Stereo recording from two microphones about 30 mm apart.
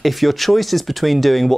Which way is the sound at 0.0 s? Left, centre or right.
Centre.